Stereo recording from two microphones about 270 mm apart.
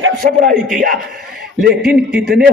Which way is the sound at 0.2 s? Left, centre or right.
Right.